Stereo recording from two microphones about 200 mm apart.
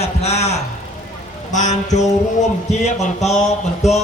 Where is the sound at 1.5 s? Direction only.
35° left (ahead or behind).